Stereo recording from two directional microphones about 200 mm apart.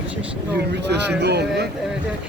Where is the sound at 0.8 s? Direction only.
60° right (ahead or behind).